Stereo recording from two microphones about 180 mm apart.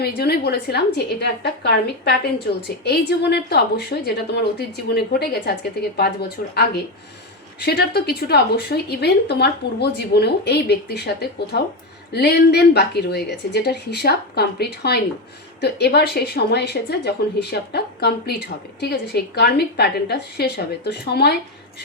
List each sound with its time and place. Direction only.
0.0 s speech: 65° left (ahead or behind)